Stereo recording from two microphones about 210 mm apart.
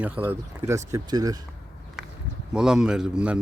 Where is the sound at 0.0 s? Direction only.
10° right (ahead or behind).